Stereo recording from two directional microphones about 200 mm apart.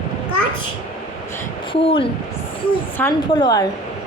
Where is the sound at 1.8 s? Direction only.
25° left (ahead or behind).